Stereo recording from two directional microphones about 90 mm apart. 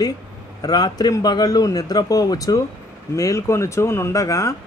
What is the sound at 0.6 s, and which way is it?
A man's voice, 50° left (ahead or behind).